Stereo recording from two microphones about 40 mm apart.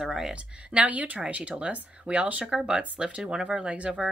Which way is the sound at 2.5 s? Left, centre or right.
Centre.